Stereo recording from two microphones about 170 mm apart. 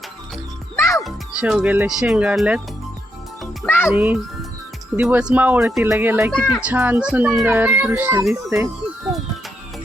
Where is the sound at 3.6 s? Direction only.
10° left (ahead or behind).